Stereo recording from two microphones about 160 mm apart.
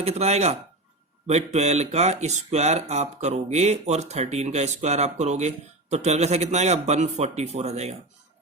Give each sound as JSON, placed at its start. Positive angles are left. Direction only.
{"t": 0.0, "sound": "speech", "side_deg": -40}